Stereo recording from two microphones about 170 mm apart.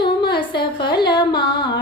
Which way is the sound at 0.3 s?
30° left (ahead or behind).